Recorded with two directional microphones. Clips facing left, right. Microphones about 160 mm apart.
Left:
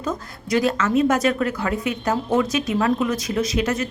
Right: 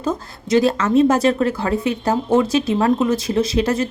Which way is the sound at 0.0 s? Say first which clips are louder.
Right 4 dB; 30° right (ahead or behind).